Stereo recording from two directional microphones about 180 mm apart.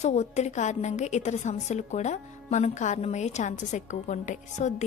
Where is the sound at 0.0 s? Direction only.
40° left (ahead or behind).